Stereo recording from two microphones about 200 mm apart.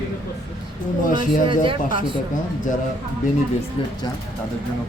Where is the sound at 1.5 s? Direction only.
25° right (ahead or behind).